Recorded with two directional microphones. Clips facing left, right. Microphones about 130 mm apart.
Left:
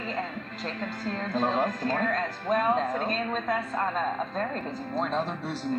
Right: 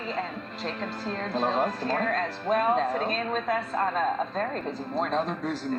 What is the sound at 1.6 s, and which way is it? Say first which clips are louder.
Speech: right 1 dB; 30° right (ahead or behind).